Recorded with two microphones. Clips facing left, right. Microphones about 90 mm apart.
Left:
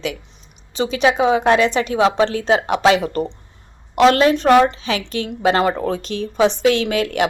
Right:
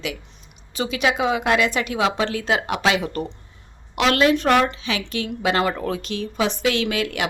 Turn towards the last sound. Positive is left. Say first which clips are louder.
# left 5 dB
turn(degrees=35)  # may be behind; listen again after turning